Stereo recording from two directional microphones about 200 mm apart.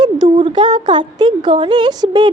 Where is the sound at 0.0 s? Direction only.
25° right (ahead or behind).